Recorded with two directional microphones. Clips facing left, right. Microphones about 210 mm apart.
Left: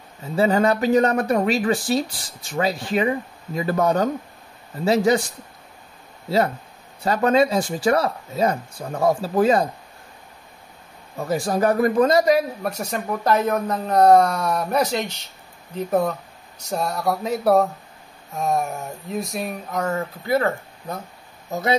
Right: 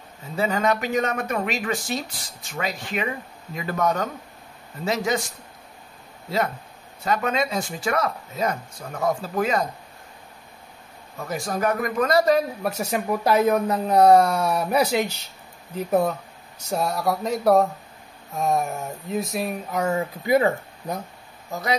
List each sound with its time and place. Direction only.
0.4 s speech: 35° left (ahead or behind)
7.1 s speech: 35° left (ahead or behind)
11.1 s speech: 30° left (ahead or behind)
12.2 s speech: 10° left (ahead or behind)
12.6 s speech: 5° right (ahead or behind)